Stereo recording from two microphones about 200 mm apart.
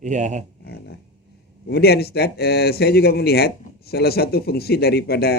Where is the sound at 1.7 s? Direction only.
55° left (ahead or behind).